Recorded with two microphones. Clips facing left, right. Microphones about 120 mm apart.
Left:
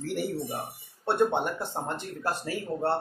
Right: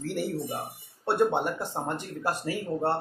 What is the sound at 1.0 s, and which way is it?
Speech, 5° right (ahead or behind).